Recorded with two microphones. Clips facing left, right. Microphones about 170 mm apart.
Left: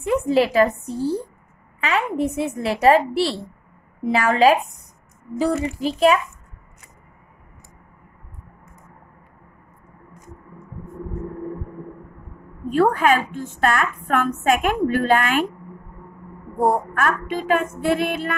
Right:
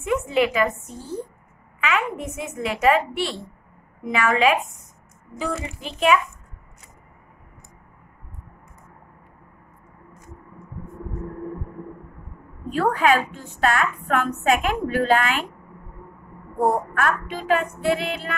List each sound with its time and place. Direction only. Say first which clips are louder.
0.0 s a woman's voice: left 3 dB; 35° left (ahead or behind)
12.7 s a woman's voice: left 2 dB; 45° left (ahead or behind)
16.6 s a woman's voice: left 1 dB; 50° left (ahead or behind)